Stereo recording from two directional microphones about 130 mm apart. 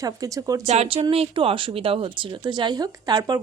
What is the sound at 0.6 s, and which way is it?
Speech, 55° right (ahead or behind).